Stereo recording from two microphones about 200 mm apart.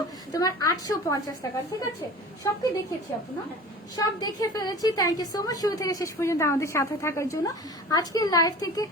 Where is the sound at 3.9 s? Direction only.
20° left (ahead or behind).